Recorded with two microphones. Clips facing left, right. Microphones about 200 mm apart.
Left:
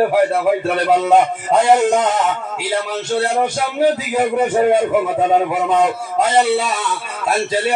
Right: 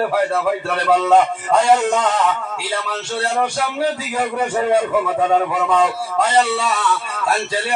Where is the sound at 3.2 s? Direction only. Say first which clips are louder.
Left 1 dB; 20° left (ahead or behind).